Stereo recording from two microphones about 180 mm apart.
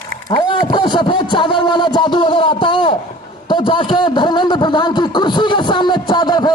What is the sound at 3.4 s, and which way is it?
A man's voice, 25° left (ahead or behind).